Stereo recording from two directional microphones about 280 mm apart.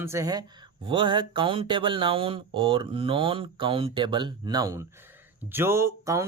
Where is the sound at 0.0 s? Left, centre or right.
Centre.